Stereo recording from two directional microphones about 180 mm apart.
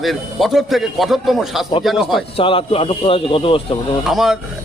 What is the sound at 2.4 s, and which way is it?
A man's voice, 30° left (ahead or behind).